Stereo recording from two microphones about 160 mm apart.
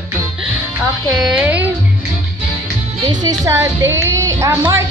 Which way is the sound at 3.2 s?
20° right (ahead or behind).